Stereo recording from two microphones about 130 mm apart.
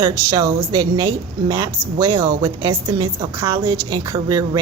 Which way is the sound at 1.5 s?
25° right (ahead or behind).